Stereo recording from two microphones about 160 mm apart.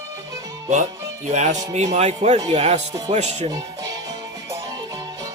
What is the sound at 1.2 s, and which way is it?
Speech, 45° right (ahead or behind).